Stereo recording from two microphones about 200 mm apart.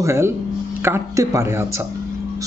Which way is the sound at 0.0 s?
15° right (ahead or behind).